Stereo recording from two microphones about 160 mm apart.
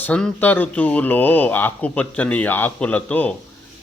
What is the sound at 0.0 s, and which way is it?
Speech, 5° left (ahead or behind).